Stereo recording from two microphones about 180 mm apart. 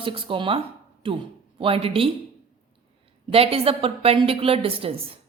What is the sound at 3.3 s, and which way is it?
A woman's voice, 30° right (ahead or behind).